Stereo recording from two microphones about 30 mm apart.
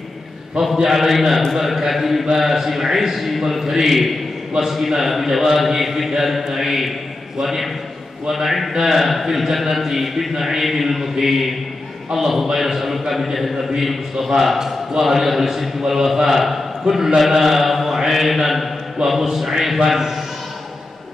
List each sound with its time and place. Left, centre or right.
0.8 s a man's voice: centre
14.6 s a man's voice: centre